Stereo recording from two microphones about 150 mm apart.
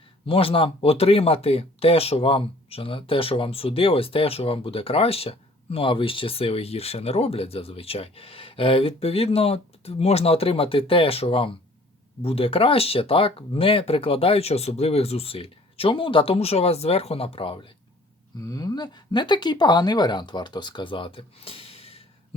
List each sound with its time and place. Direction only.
0.3 s speech: 40° left (ahead or behind)
18.3 s speech: 25° left (ahead or behind); by 22.4 s 40° left (ahead or behind)